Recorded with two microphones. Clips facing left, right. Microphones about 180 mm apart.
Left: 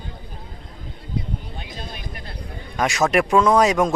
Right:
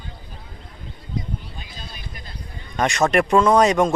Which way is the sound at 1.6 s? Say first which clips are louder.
Left 4 dB; 65° left (ahead or behind).